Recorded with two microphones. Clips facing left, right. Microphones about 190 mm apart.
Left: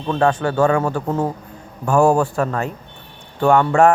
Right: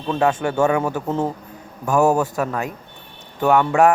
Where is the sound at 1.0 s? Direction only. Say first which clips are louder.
Left 1 dB; 10° left (ahead or behind).